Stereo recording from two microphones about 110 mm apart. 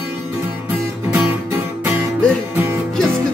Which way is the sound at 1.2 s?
15° right (ahead or behind).